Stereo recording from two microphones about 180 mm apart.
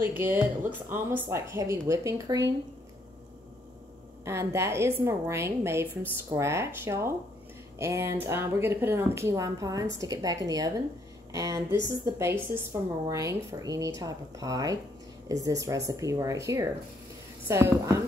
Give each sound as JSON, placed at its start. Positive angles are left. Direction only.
{"t": 0.0, "sound": "speech", "side_deg": -10}
{"t": 4.2, "sound": "speech", "side_deg": -15}